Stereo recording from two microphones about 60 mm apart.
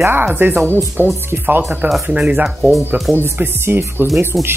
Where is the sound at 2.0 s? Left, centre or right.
Right.